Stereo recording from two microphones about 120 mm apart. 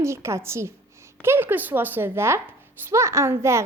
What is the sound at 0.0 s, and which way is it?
A woman's voice, 25° right (ahead or behind).